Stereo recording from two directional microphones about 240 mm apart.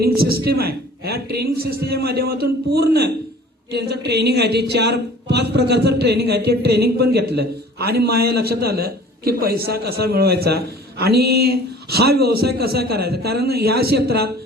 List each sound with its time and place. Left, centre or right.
0.0 s a woman's voice: right